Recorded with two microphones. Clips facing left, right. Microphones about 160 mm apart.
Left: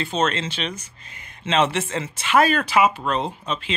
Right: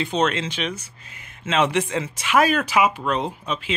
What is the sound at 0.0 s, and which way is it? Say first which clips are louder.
Speech: right 1 dB; 15° right (ahead or behind).